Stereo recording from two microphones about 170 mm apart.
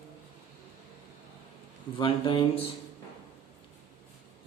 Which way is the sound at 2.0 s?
30° left (ahead or behind).